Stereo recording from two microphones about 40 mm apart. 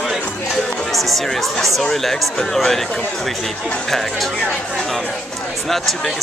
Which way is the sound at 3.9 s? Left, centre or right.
Centre.